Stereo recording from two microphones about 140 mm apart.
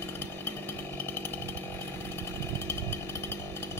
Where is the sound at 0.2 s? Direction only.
15° left (ahead or behind).